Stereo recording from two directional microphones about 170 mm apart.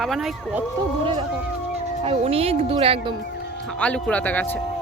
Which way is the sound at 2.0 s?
35° right (ahead or behind).